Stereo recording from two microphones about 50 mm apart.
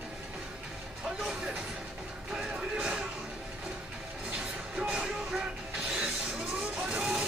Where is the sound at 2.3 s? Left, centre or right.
Centre.